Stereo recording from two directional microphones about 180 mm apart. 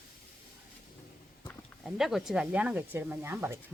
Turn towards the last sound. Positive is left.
turn(degrees=-10)  # may be behind; listen again after turning